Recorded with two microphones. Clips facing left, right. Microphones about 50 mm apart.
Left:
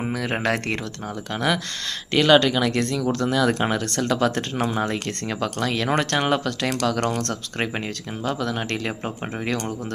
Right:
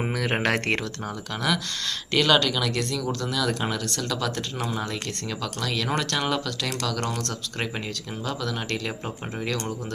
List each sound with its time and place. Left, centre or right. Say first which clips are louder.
0.4 s speech: left 1 dB; right
1.3 s speech: left 3 dB; left
3.1 s speech: left 6 dB; left
3.3 s speech: left 5 dB; left
8.2 s speech: left 5 dB; left